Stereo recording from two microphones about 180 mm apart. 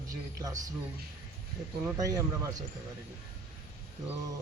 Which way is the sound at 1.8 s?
20° right (ahead or behind).